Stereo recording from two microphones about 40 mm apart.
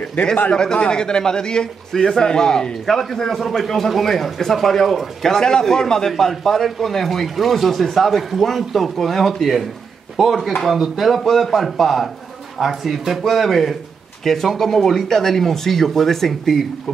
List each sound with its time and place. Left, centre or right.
0.5 s a man's voice: left; by 5.3 s centre
5.3 s a man's voice: centre